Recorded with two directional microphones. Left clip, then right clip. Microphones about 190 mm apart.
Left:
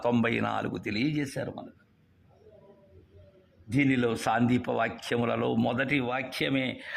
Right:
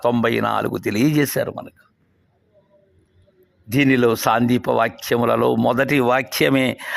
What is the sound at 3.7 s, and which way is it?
A man's voice, 40° right (ahead or behind).